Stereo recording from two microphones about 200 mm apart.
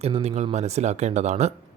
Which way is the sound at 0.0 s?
30° right (ahead or behind).